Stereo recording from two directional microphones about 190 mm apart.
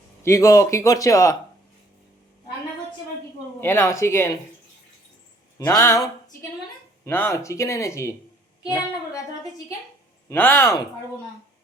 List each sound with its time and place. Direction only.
0.2 s speech: 15° left (ahead or behind)
3.6 s speech: 15° left (ahead or behind)
5.5 s speech: 15° left (ahead or behind)
10.2 s speech: 10° left (ahead or behind)